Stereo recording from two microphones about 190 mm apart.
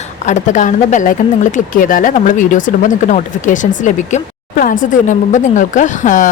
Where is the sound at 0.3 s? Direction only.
40° left (ahead or behind).